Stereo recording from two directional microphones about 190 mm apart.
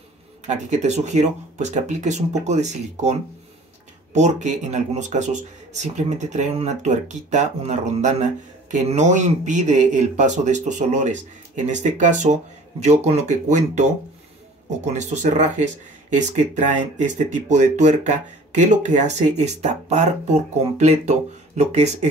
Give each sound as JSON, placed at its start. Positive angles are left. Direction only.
{"t": 0.5, "sound": "speech", "side_deg": -40}
{"t": 14.9, "sound": "speech", "side_deg": -40}